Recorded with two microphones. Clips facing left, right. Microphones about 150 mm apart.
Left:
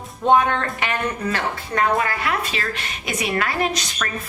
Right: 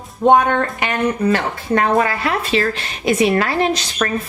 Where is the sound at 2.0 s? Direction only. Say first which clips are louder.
Right 4 dB; 30° right (ahead or behind).